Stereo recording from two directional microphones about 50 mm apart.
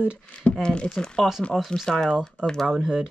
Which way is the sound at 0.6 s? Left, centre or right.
Centre.